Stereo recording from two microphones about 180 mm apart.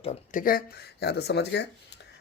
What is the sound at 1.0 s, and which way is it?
Speech, 65° left (ahead or behind).